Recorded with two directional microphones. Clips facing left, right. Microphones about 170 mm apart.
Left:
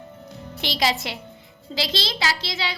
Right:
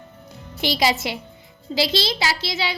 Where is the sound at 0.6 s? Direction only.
Centre (ahead or behind).